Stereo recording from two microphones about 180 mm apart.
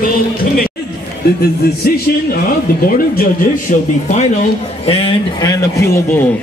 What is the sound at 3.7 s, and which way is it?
A man's voice, 45° left (ahead or behind).